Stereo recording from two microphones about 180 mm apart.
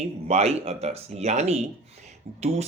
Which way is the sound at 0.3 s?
35° right (ahead or behind).